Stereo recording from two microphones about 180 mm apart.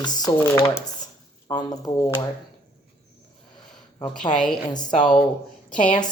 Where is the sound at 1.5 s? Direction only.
20° left (ahead or behind).